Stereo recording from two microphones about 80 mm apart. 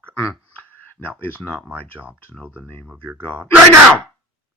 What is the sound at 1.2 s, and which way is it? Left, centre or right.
Speech, left.